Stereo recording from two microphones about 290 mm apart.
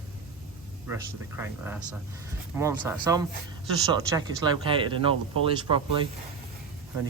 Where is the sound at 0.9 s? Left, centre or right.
Centre.